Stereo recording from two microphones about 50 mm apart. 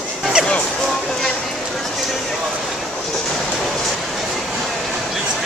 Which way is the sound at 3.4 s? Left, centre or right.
Centre.